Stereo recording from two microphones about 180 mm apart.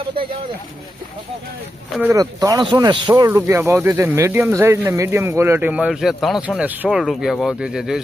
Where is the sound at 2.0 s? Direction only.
15° right (ahead or behind).